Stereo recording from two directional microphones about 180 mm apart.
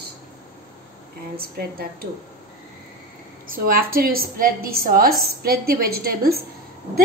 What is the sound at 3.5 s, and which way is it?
A woman's voice, 55° right (ahead or behind).